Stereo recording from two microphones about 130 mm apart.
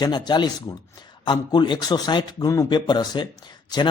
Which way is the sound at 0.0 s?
35° left (ahead or behind).